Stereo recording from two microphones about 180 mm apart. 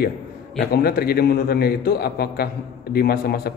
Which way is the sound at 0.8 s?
60° left (ahead or behind).